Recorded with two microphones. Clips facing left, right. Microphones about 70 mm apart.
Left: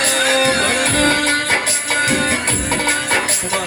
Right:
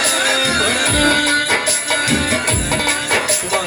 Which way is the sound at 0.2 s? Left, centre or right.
Left.